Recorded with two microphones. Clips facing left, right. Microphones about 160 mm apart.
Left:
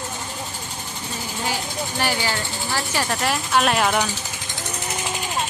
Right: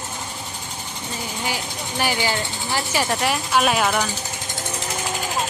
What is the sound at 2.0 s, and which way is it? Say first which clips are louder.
Speech: right 2 dB; 10° right (ahead or behind).